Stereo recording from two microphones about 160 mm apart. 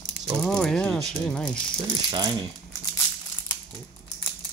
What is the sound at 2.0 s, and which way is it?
Speech, 25° right (ahead or behind).